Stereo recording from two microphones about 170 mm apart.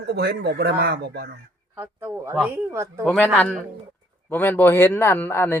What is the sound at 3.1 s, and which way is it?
Speech, 10° left (ahead or behind).